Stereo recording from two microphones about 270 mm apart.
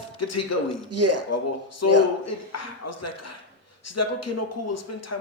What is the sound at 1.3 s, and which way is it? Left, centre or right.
A man's voice, left.